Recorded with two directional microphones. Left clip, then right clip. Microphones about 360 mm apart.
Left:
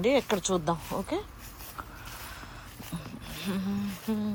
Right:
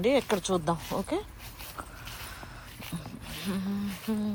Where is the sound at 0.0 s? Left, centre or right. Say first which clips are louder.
Even; centre.